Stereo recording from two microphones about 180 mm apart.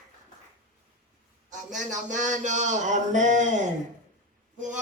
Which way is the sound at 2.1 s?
45° right (ahead or behind).